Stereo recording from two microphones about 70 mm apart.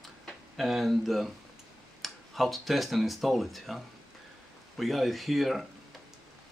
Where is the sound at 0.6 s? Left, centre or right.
Centre.